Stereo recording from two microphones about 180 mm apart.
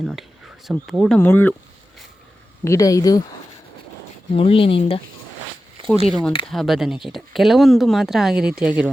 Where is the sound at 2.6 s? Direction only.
20° left (ahead or behind).